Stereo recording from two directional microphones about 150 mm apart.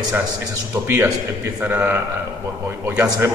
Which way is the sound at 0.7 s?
20° right (ahead or behind).